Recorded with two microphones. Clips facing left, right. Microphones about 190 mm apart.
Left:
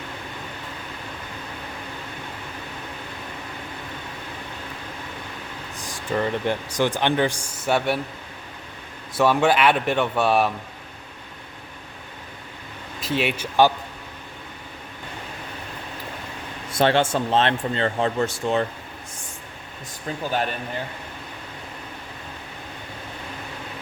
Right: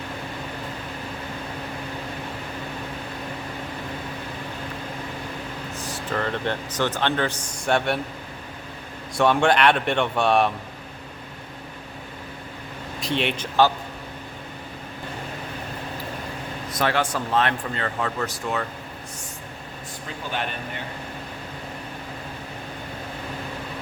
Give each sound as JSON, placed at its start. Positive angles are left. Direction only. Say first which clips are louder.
{"t": 5.8, "sound": "speech", "louder": "left 3 dB", "side_deg": 15}
{"t": 9.1, "sound": "speech", "louder": "even", "side_deg": 5}
{"t": 13.0, "sound": "speech", "louder": "left 1 dB", "side_deg": 5}
{"t": 16.7, "sound": "speech", "louder": "left 5 dB", "side_deg": 25}